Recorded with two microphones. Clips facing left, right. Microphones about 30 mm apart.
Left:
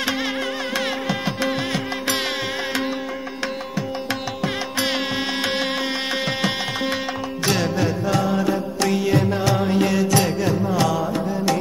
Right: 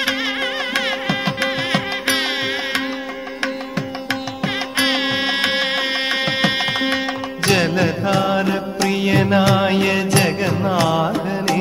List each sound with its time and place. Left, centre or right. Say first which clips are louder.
0.0 s music: right 3 dB; right
4.1 s music: right 4 dB; right
7.5 s music: right 6 dB; right